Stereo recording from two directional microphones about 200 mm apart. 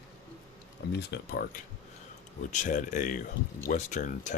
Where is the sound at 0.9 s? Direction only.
50° left (ahead or behind).